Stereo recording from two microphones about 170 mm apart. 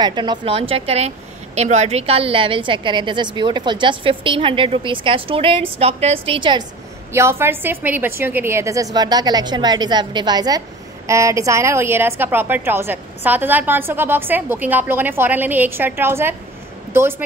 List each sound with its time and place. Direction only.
0.0 s a woman's voice: 25° right (ahead or behind)
7.1 s a woman's voice: 15° right (ahead or behind)